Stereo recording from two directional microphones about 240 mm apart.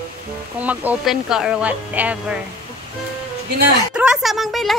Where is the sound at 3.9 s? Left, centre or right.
Centre.